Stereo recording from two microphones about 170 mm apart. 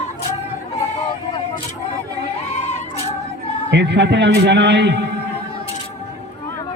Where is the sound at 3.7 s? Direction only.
90° right.